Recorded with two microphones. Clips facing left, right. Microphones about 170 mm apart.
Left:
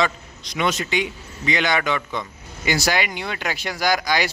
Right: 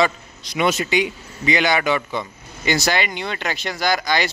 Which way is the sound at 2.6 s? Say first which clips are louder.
Right 1 dB; 10° left (ahead or behind).